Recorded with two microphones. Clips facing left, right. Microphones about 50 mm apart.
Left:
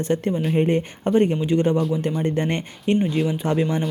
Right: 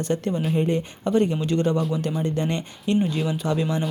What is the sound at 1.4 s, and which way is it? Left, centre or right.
Speech, centre.